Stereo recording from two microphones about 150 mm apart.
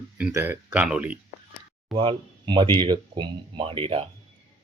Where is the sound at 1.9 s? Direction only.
35° right (ahead or behind).